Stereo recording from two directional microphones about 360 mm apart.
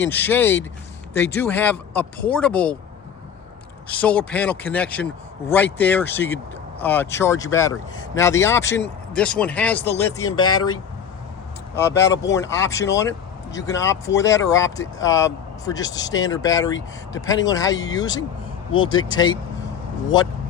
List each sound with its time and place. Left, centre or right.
0.0 s speech: centre
3.8 s speech: centre
10.3 s speech: left
11.7 s speech: centre